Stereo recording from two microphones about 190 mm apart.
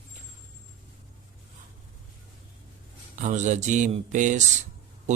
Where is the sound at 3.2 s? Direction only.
40° right (ahead or behind).